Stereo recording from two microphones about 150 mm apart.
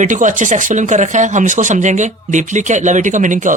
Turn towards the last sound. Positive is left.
turn(degrees=-60)  # may be behind; listen again after turning